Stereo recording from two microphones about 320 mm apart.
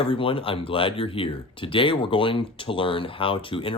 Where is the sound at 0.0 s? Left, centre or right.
Centre.